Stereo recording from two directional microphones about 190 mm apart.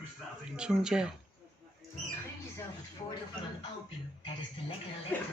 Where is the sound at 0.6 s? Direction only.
5° right (ahead or behind).